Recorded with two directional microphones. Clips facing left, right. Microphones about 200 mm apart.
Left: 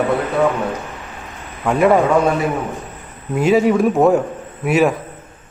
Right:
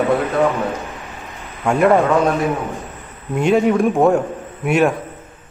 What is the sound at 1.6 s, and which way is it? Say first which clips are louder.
Speech: even; centre (ahead or behind).